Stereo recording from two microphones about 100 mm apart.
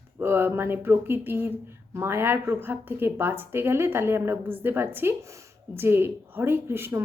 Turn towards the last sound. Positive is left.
turn(degrees=-25)  # may be behind; listen again after turning